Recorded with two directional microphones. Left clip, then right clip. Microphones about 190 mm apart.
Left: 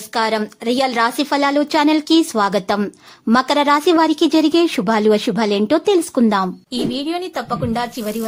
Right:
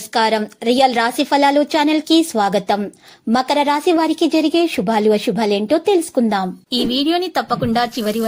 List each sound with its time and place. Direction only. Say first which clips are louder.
0.1 s a woman's voice: right 2 dB; 5° right (ahead or behind)
6.9 s a woman's voice: right 5 dB; 20° right (ahead or behind)